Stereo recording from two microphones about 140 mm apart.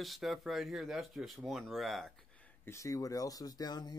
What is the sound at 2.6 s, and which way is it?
Speech, 20° left (ahead or behind).